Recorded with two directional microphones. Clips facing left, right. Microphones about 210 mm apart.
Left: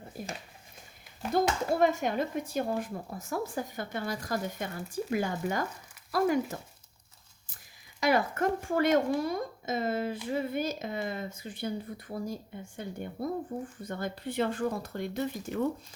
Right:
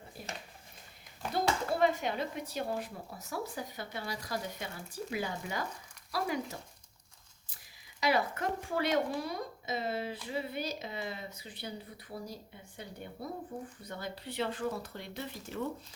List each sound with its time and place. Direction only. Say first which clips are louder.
0.1 s a sound: left 6 dB; 45° left (ahead or behind)
1.3 s speech: left 4 dB; 45° left (ahead or behind)
8.0 s speech: left 4 dB; 50° left (ahead or behind)